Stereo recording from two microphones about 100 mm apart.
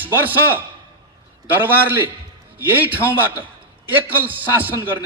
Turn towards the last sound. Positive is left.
turn(degrees=-20)  # may be behind; listen again after turning